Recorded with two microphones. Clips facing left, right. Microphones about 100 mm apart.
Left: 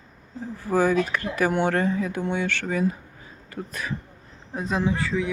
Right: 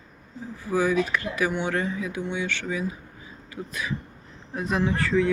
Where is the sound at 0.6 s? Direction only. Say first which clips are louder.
Left 2 dB; 45° left (ahead or behind).